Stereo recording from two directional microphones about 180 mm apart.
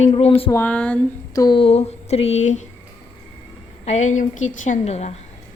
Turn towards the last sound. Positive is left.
turn(degrees=35)  # may be behind; listen again after turning